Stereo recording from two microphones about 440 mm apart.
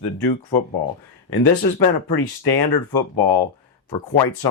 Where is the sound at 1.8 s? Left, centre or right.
Left.